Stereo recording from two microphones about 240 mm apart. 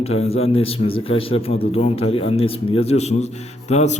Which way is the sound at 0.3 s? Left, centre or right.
Left.